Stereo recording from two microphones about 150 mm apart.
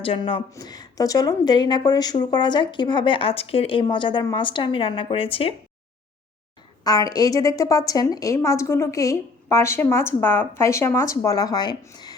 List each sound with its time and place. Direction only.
0.5 s a woman's voice: 25° left (ahead or behind)
6.8 s a woman's voice: 25° left (ahead or behind)